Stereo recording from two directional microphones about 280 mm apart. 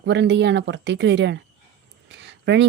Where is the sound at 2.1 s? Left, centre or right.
Right.